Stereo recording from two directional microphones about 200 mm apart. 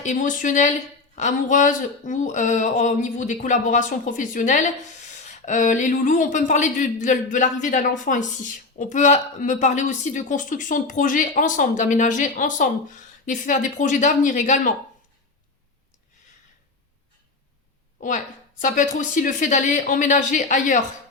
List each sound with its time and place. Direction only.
0.0 s speech: 40° left (ahead or behind)
18.0 s a woman's voice: 40° left (ahead or behind)